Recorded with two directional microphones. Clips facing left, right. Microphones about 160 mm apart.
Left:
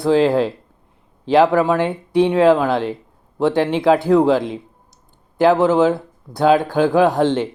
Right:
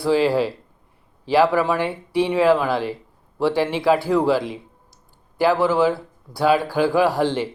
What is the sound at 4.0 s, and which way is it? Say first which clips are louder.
Speech: left 6 dB; 20° left (ahead or behind).